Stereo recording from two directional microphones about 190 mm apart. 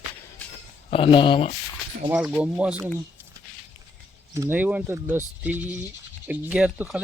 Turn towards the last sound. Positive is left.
turn(degrees=-5)  # may be behind; listen again after turning